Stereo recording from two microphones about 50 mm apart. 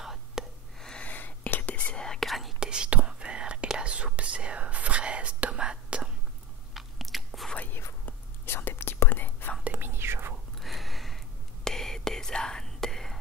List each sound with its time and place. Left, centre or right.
0.0 s whispering: centre
0.9 s whispering: left
2.0 s whispering: centre
2.2 s whispering: centre
2.6 s whispering: centre
6.7 s biting: centre
8.0 s whispering: left
9.8 s whispering: right
10.6 s a sound: centre
11.6 s whispering: centre